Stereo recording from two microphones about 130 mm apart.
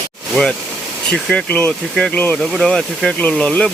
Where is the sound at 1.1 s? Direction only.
5° left (ahead or behind).